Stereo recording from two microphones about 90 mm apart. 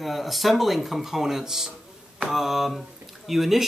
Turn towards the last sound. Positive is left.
turn(degrees=0)  # may be behind; listen again after turning